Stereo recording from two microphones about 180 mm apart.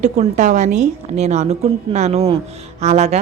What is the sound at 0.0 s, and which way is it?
A woman's voice, 40° right (ahead or behind).